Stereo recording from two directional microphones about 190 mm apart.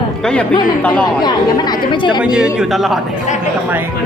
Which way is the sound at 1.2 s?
20° left (ahead or behind).